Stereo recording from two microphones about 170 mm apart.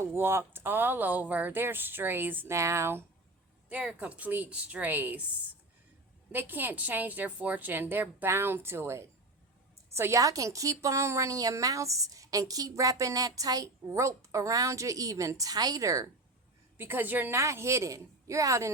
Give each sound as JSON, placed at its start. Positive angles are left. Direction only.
{"t": 0.0, "sound": "speech", "side_deg": -15}
{"t": 6.3, "sound": "a woman's voice", "side_deg": -10}